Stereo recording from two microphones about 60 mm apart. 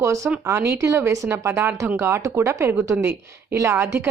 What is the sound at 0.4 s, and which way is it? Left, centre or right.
Speech, right.